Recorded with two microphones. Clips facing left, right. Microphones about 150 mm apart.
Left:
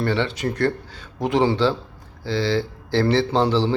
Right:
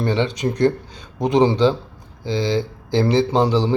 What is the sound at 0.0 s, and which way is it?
A man's voice, 15° right (ahead or behind).